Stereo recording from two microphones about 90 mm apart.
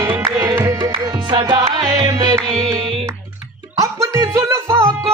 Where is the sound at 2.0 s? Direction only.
45° right (ahead or behind).